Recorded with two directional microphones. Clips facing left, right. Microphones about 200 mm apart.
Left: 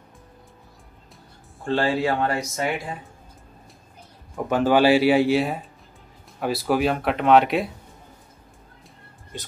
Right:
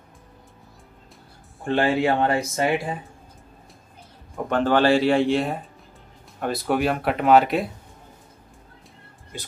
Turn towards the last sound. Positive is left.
turn(degrees=0)  # may be behind; listen again after turning